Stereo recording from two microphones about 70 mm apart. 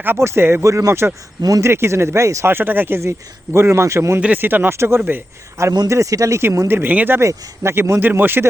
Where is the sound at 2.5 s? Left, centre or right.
Right.